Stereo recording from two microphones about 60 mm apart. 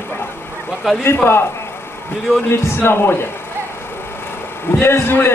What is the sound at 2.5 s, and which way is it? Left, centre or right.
Speech, left.